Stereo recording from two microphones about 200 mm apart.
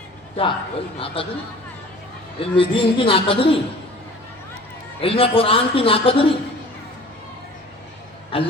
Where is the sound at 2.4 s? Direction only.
25° left (ahead or behind).